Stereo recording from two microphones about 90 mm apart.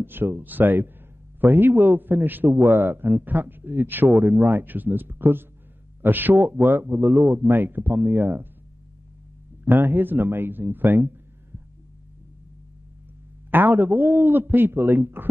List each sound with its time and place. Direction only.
0.0 s a man's voice: 25° right (ahead or behind)
9.7 s a man's voice: 25° right (ahead or behind)
13.5 s a man's voice: 20° right (ahead or behind)